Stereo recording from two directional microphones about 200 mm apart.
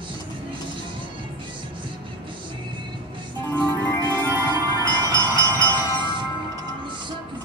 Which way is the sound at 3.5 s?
15° left (ahead or behind).